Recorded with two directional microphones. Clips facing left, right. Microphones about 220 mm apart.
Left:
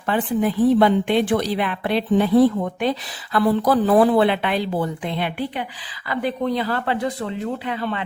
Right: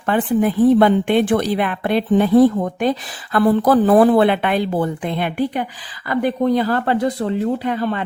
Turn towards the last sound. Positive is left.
turn(degrees=-45)  # may be behind; listen again after turning